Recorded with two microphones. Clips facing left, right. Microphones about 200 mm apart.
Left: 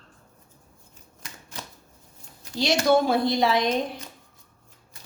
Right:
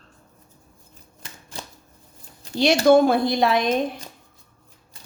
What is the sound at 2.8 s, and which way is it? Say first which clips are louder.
Speech: right 5 dB; 55° right (ahead or behind).